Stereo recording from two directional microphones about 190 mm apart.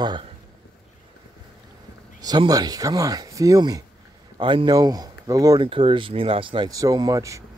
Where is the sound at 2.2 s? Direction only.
20° right (ahead or behind).